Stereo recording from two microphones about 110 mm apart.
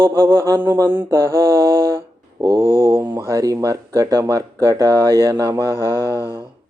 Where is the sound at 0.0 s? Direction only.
25° right (ahead or behind).